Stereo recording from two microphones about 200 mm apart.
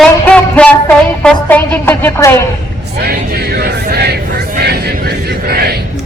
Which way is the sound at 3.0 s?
50° right (ahead or behind).